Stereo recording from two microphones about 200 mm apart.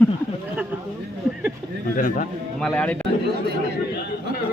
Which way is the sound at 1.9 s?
40° left (ahead or behind).